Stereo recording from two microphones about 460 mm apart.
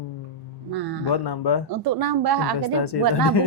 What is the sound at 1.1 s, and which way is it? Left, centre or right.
Speech, left.